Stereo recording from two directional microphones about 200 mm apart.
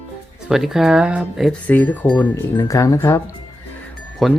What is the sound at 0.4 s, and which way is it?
Speech, centre (ahead or behind).